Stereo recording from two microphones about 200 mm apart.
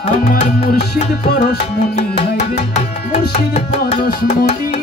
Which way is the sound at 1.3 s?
50° left (ahead or behind).